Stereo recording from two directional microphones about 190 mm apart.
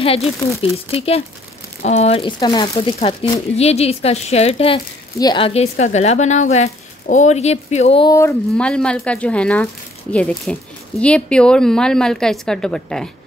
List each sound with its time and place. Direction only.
0.0 s speech: 30° left (ahead or behind)
8.1 s speech: 15° left (ahead or behind)